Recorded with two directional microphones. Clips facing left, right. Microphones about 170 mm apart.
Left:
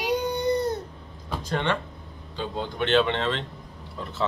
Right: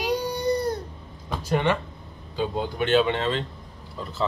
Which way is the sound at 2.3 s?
10° right (ahead or behind).